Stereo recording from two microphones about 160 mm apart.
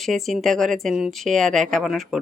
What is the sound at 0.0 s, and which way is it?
A woman's voice, centre (ahead or behind).